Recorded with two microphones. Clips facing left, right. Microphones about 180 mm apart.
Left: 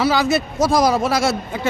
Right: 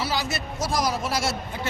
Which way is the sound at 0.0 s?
70° left (ahead or behind).